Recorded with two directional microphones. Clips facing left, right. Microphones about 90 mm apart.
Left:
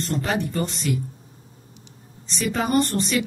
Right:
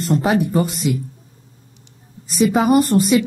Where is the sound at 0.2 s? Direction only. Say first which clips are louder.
Right 7 dB; 15° right (ahead or behind).